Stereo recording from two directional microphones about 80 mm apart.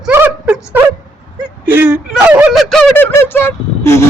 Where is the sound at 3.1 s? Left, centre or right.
Left.